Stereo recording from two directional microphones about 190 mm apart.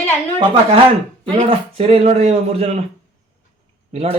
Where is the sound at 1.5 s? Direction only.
30° right (ahead or behind).